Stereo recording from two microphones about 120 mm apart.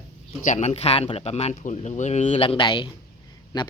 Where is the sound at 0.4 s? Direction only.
80° left.